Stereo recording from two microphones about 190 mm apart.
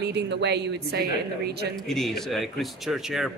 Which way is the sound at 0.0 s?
65° right (ahead or behind).